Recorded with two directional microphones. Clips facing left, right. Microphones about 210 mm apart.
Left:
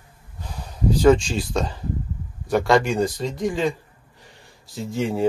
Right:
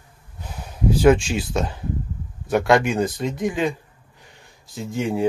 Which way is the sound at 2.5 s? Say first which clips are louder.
Right 1 dB; centre (ahead or behind).